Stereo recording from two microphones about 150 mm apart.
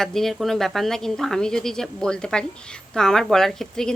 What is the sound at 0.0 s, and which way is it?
Speech, centre (ahead or behind).